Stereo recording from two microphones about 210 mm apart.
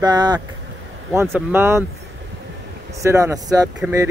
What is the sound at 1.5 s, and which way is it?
Speech, 10° right (ahead or behind).